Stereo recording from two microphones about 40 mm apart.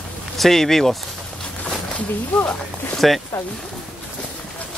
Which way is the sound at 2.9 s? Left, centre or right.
Centre.